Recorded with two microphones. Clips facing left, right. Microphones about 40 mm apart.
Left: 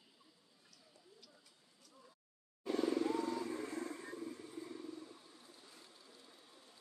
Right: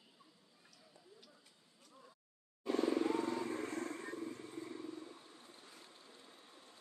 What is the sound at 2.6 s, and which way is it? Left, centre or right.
Vehicle, right.